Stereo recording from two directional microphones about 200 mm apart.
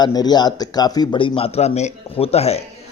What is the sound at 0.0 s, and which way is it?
A man's voice, 20° left (ahead or behind).